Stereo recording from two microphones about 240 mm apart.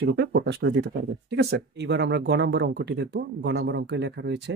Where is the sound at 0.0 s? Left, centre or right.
Right.